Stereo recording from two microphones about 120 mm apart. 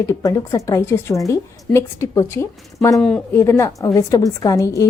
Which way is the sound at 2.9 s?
5° left (ahead or behind).